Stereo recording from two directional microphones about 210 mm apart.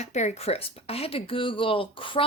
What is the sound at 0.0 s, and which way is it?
Speech, 35° left (ahead or behind).